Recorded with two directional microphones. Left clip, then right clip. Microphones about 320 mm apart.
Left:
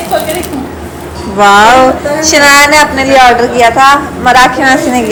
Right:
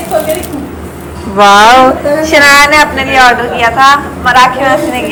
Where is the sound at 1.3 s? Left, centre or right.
Centre.